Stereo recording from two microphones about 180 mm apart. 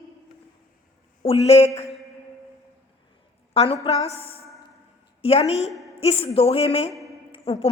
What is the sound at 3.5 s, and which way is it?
A woman's voice, 35° left (ahead or behind).